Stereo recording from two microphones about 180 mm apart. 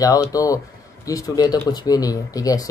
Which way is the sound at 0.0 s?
20° left (ahead or behind).